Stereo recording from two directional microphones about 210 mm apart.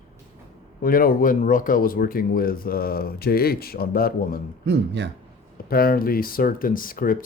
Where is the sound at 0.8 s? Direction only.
45° left (ahead or behind).